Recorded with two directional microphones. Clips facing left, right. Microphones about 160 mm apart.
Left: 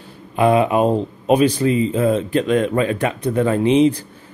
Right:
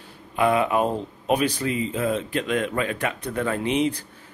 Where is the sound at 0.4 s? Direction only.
25° left (ahead or behind).